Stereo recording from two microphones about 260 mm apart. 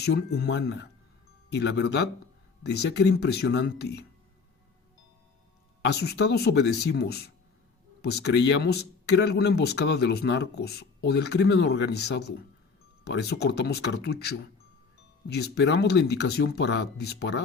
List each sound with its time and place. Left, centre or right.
0.0 s speech: left
5.9 s speech: left